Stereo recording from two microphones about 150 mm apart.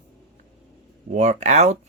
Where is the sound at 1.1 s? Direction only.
50° right (ahead or behind).